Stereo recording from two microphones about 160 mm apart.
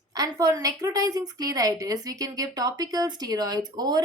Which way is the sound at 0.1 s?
20° right (ahead or behind).